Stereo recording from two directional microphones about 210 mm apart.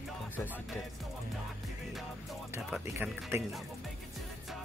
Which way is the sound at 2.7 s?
10° right (ahead or behind).